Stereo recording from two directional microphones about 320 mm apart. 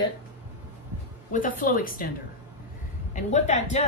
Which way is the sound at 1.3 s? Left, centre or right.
Left.